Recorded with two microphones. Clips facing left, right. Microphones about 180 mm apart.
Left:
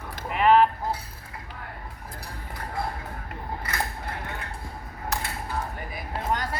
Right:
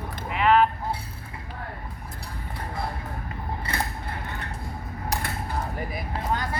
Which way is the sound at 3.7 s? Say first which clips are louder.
Right 1 dB; 30° right (ahead or behind).